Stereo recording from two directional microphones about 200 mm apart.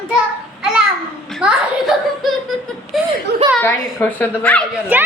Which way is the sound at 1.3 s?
5° right (ahead or behind).